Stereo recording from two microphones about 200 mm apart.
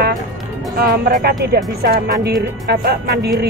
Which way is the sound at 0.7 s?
50° right (ahead or behind).